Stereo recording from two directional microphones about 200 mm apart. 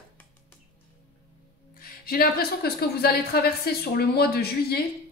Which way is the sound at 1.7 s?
50° left (ahead or behind).